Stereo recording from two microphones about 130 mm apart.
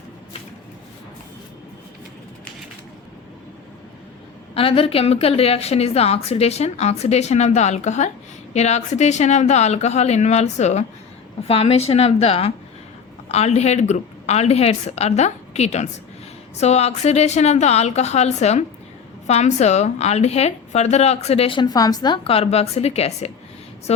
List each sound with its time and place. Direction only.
4.5 s a woman's voice: 45° left (ahead or behind)
11.4 s a woman's voice: 50° left (ahead or behind); by 22.2 s 30° left (ahead or behind)
22.2 s a woman's voice: 50° left (ahead or behind)